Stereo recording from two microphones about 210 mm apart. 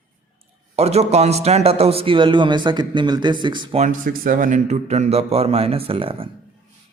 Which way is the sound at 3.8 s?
40° right (ahead or behind).